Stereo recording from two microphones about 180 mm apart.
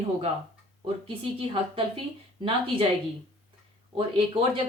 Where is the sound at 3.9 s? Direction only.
30° right (ahead or behind).